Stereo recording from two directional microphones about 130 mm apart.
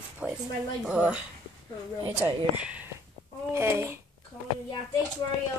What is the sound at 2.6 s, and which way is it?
Speech, 10° right (ahead or behind).